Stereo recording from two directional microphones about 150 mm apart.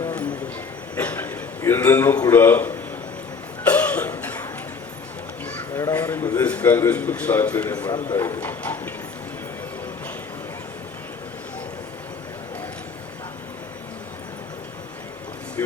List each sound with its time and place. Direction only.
0.0 s a sound: 10° left (ahead or behind)
2.3 s a man's voice: 15° left (ahead or behind)
3.7 s cough: 10° left (ahead or behind)
5.7 s caw: 15° left (ahead or behind)
6.3 s a man's voice: 10° left (ahead or behind)
15.6 s a sound: 15° left (ahead or behind)